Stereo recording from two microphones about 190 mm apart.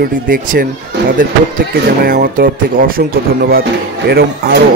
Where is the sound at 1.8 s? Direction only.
50° right (ahead or behind).